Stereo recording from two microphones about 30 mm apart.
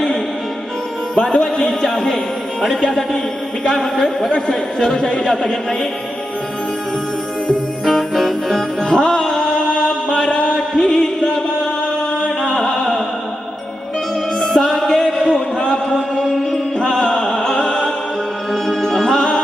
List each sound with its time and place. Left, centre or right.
1.1 s music: left
1.6 s speech: centre
5.2 s speech: centre
7.9 s music: centre
8.9 s music: left
10.2 s mantra: left
10.8 s music: centre
12.5 s opera: centre
14.3 s music: centre
14.6 s a sound: centre; by 15.8 s left
15.9 s chant: centre
16.9 s music: left
18.5 s music: centre